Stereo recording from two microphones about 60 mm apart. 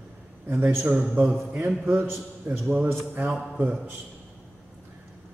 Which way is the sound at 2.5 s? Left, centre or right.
Right.